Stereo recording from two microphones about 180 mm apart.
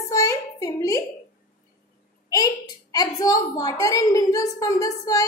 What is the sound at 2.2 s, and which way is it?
A woman's voice, 20° left (ahead or behind).